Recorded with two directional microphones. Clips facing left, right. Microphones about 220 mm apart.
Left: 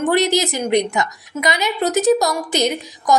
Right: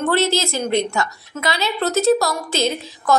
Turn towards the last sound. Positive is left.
turn(degrees=15)  # may be behind; listen again after turning